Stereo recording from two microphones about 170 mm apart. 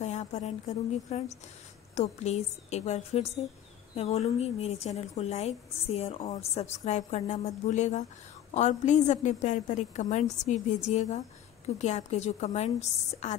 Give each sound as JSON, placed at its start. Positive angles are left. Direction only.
{"t": 0.0, "sound": "a woman's voice", "side_deg": 45}